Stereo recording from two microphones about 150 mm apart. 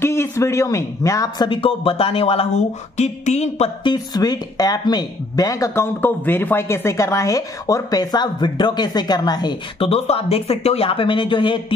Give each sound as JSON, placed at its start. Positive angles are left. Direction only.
{"t": 0.0, "sound": "a woman's voice", "side_deg": 15}
{"t": 3.8, "sound": "a woman's voice", "side_deg": 25}